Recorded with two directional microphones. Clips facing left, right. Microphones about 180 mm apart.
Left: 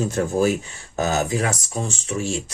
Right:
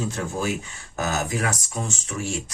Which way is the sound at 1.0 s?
30° left (ahead or behind).